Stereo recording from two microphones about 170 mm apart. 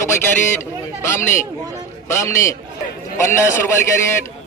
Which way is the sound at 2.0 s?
15° left (ahead or behind).